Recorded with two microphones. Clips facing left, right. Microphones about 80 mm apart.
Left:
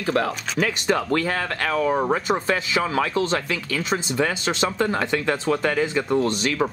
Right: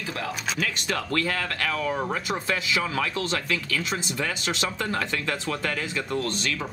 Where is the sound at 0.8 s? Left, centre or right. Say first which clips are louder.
Left 5 dB; left.